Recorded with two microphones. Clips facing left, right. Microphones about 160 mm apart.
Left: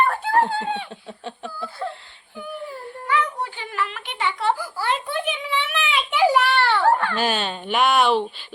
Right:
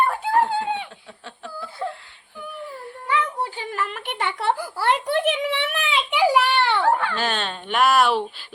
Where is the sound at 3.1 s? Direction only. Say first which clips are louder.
Even; 30° right (ahead or behind); by 5.6 s 80° right.